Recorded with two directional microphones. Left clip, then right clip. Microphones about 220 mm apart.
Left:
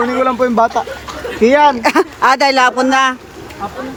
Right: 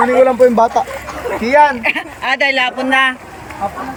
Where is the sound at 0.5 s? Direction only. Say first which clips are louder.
Right 1 dB; 10° left (ahead or behind).